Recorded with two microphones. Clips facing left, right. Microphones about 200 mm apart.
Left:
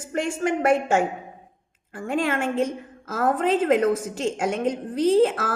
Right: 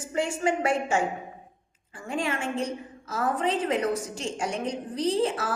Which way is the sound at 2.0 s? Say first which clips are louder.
Left 5 dB; 55° left (ahead or behind).